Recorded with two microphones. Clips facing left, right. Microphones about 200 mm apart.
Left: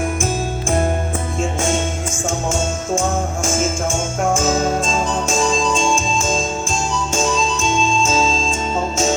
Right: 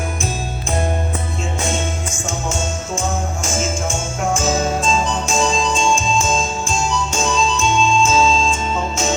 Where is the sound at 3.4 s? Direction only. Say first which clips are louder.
Left 3 dB; 50° left (ahead or behind).